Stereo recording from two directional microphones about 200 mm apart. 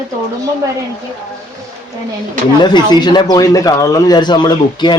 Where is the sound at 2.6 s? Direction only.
20° left (ahead or behind).